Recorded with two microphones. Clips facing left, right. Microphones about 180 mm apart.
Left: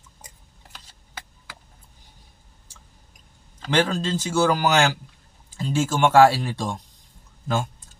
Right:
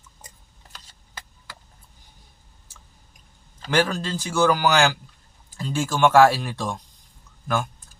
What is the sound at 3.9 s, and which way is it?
Speech, 20° left (ahead or behind).